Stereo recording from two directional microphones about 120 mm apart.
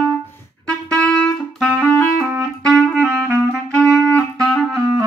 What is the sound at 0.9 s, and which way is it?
Music, 10° left (ahead or behind).